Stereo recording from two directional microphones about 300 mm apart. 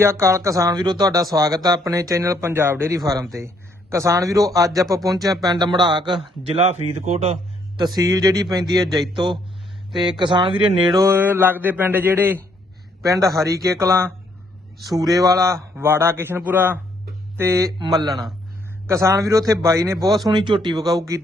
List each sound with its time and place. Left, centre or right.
0.0 s a man's voice: centre
15.1 s speech: centre